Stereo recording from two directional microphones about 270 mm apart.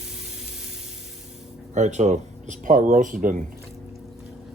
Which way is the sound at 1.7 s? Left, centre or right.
Right.